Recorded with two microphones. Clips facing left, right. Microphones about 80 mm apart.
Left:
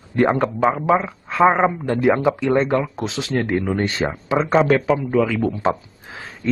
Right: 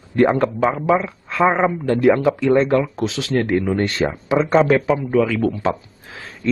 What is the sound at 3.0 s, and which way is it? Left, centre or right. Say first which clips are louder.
Speech: right 3 dB; left.